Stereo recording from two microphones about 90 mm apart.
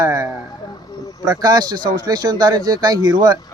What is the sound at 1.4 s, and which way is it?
A man's voice, 45° right (ahead or behind).